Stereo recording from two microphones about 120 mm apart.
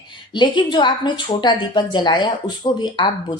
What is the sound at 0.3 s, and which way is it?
Speech, 40° left (ahead or behind).